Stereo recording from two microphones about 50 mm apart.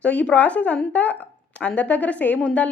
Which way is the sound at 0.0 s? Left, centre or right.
Left.